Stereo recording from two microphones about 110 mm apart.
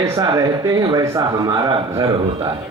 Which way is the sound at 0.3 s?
30° right (ahead or behind).